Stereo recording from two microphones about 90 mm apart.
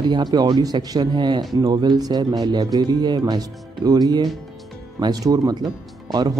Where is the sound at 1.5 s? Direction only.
45° right (ahead or behind).